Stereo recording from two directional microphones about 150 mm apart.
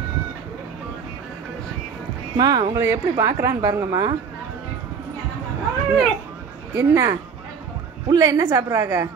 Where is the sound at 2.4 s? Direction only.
25° right (ahead or behind).